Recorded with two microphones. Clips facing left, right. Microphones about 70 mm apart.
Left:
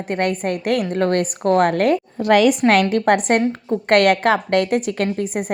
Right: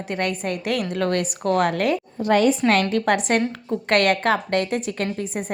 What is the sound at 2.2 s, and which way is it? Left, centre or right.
Speech, left.